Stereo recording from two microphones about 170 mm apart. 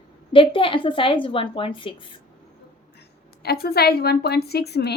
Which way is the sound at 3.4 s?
65° left (ahead or behind).